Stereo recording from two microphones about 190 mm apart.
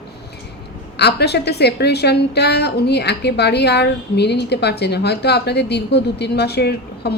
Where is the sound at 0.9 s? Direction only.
60° left (ahead or behind).